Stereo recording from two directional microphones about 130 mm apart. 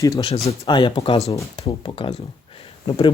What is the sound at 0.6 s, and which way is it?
Speech, 35° left (ahead or behind).